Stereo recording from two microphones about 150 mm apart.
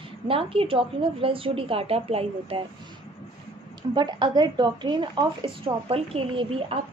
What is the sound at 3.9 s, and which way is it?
A woman's voice, 30° right (ahead or behind).